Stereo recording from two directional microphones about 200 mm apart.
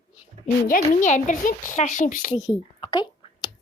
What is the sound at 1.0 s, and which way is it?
Speech, 40° left (ahead or behind).